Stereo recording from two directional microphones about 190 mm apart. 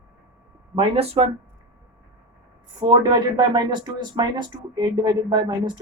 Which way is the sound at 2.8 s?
20° right (ahead or behind).